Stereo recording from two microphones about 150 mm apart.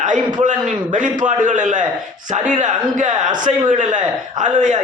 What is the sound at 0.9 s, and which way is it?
A man's voice, 55° right (ahead or behind).